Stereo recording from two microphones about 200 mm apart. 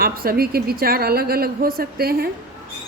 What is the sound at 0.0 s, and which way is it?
A woman's voice, 50° right (ahead or behind).